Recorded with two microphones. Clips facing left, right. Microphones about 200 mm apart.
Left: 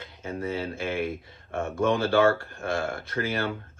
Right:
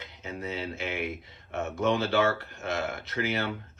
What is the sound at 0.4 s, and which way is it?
Speech, 55° left (ahead or behind).